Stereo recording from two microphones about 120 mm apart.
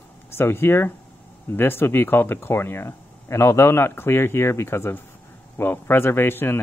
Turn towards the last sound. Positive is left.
turn(degrees=20)  # may be behind; listen again after turning